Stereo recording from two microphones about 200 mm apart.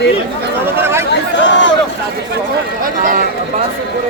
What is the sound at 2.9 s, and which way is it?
Speech, 40° right (ahead or behind).